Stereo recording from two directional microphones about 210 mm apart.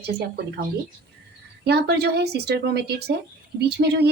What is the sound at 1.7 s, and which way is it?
A woman's voice, 50° right (ahead or behind).